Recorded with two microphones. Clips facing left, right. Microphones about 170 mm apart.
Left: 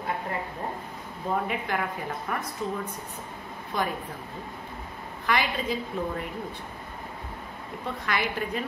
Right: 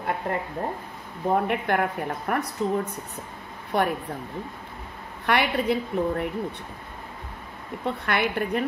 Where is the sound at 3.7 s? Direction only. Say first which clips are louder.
Right 6 dB; 65° right (ahead or behind).